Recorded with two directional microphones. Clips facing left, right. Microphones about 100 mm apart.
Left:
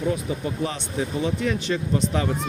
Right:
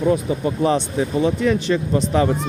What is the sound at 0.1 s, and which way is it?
Speech, 40° right (ahead or behind).